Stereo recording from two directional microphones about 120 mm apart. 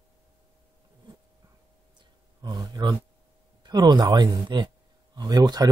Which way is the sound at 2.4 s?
35° right (ahead or behind).